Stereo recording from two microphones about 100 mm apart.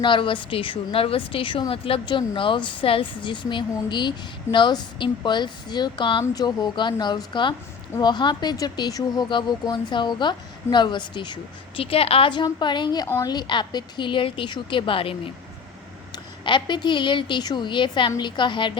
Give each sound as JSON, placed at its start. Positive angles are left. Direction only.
{"t": 0.0, "sound": "a woman's voice", "side_deg": 55}
{"t": 11.8, "sound": "a woman's voice", "side_deg": 70}
{"t": 12.3, "sound": "a woman's voice", "side_deg": 50}
{"t": 16.1, "sound": "a woman's voice", "side_deg": 50}